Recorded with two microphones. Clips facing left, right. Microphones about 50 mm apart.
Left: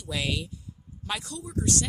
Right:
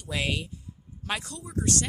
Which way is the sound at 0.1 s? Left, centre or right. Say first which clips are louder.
Right 1 dB; right.